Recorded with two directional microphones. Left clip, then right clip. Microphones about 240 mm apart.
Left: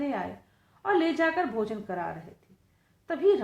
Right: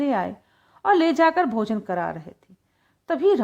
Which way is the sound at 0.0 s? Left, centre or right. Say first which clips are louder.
Right 8 dB; right.